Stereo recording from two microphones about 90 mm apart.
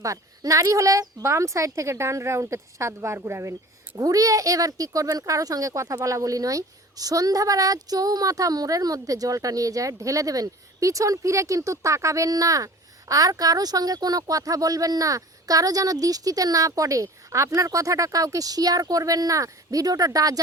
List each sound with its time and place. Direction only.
0.0 s speech: 40° right (ahead or behind)
3.9 s speech: 40° right (ahead or behind)